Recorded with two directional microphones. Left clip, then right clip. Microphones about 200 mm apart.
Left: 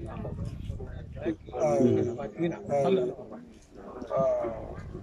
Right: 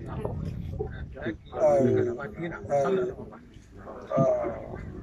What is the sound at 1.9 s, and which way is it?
A man's voice, 15° left (ahead or behind).